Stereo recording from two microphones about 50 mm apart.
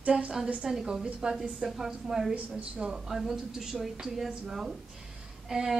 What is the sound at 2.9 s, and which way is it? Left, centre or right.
A woman's voice, centre.